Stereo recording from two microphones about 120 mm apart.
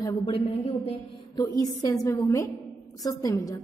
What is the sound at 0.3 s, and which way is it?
Speech, 60° left (ahead or behind).